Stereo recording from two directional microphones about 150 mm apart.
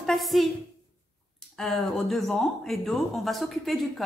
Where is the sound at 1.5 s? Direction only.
Centre (ahead or behind).